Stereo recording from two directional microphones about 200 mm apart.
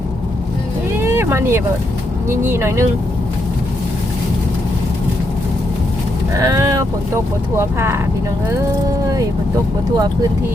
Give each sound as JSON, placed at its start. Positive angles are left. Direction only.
{"t": 0.9, "sound": "vehicle", "side_deg": -10}
{"t": 2.4, "sound": "speech", "side_deg": -10}
{"t": 6.3, "sound": "speech", "side_deg": -15}